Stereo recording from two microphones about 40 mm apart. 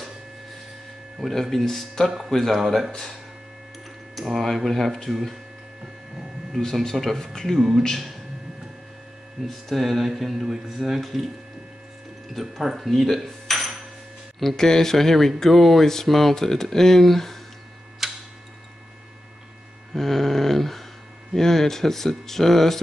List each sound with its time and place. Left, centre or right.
1.2 s speech: centre
2.0 s speech: centre
2.3 s speech: centre
2.6 s speech: centre
4.1 s speech: centre
6.6 s speech: centre
7.5 s speech: centre
9.5 s speech: centre
11.0 s speech: centre
12.4 s speech: centre
14.6 s speech: centre
18.0 s tick-tock: centre
19.9 s a sound: centre
21.4 s speech: centre